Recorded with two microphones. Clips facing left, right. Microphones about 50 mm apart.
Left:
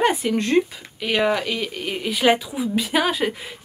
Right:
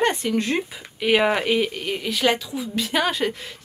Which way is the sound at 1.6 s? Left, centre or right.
Centre.